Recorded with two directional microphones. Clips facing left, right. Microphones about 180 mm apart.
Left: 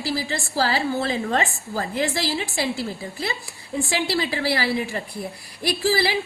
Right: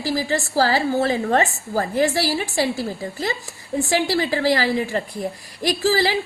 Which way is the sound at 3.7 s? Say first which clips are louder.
Right 4 dB; 45° right (ahead or behind).